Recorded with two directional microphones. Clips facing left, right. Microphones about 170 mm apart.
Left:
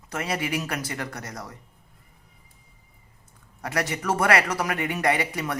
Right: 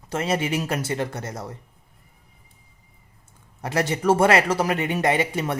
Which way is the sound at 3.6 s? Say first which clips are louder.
Right 4 dB; 25° right (ahead or behind).